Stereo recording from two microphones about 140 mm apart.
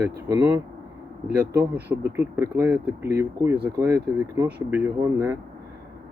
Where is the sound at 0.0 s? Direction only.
15° right (ahead or behind).